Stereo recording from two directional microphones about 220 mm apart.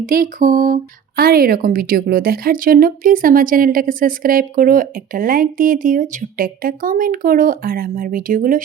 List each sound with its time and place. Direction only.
0.0 s speech: 35° right (ahead or behind)